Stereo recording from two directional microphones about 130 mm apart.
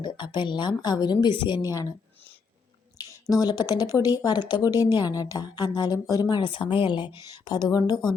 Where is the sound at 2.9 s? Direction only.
30° left (ahead or behind).